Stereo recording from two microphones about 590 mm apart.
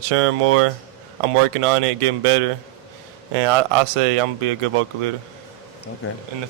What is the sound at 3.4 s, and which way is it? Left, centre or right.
Speech, right.